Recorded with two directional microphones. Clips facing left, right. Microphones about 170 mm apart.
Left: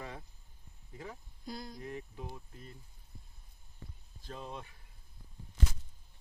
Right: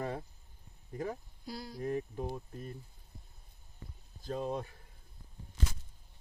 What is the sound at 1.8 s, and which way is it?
Speech, 45° right (ahead or behind).